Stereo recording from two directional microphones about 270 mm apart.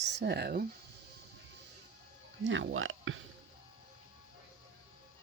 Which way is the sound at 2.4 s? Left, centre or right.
Right.